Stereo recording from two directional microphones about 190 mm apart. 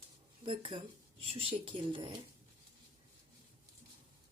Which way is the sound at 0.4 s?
25° right (ahead or behind).